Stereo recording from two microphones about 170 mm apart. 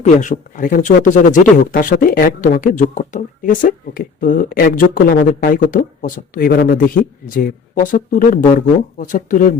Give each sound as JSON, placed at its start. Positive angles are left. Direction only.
{"t": 0.0, "sound": "speech", "side_deg": 45}
{"t": 5.7, "sound": "speech", "side_deg": 50}